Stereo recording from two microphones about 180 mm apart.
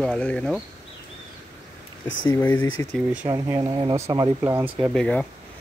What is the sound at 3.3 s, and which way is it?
Speech, 20° right (ahead or behind).